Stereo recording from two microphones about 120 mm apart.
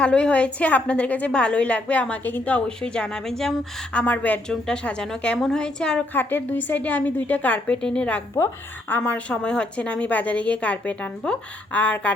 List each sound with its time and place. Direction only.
0.0 s a woman's voice: 10° left (ahead or behind)